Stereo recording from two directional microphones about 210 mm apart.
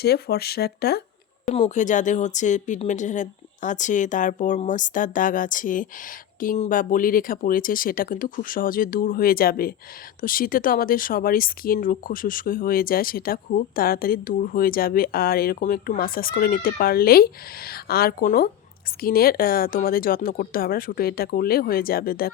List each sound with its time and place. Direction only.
0.0 s speech: 50° left (ahead or behind)
1.5 s speech: 35° left (ahead or behind)